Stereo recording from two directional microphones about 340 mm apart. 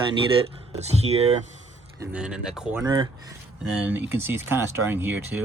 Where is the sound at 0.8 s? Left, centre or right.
Centre.